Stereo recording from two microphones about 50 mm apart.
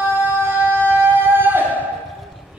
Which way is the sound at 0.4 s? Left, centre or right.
Right.